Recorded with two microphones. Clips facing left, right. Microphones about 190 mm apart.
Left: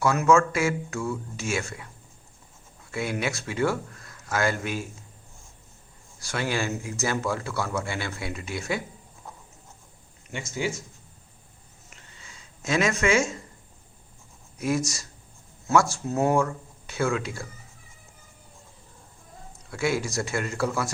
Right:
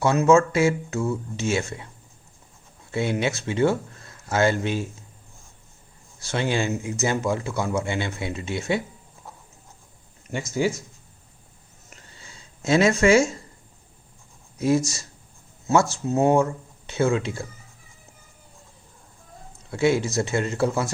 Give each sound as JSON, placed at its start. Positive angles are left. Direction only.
{"t": 0.0, "sound": "speech", "side_deg": -25}
{"t": 2.9, "sound": "speech", "side_deg": -25}
{"t": 6.1, "sound": "speech", "side_deg": -25}
{"t": 11.9, "sound": "a sound", "side_deg": -35}
{"t": 14.6, "sound": "speech", "side_deg": -25}
{"t": 19.7, "sound": "speech", "side_deg": -25}